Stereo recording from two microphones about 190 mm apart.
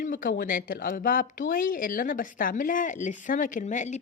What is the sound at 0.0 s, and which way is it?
Speech, 45° left (ahead or behind).